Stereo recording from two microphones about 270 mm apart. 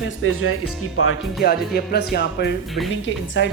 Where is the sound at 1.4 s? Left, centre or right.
Left.